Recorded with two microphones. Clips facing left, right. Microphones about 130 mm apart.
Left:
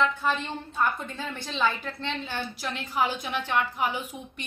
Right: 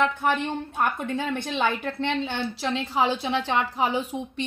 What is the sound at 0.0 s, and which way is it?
A woman's voice, 60° right (ahead or behind).